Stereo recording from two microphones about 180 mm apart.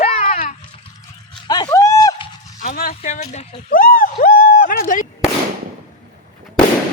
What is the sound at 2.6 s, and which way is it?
Speech, 50° left (ahead or behind).